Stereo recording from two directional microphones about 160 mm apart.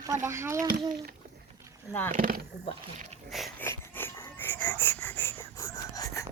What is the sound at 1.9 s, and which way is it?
Speech, 15° left (ahead or behind).